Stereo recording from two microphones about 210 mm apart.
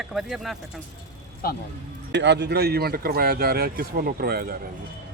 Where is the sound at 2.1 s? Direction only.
55° right (ahead or behind).